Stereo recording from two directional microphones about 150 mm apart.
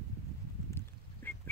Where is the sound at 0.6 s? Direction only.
15° left (ahead or behind).